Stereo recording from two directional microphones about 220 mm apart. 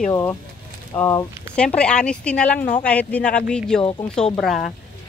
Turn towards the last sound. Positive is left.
turn(degrees=0)  # may be behind; listen again after turning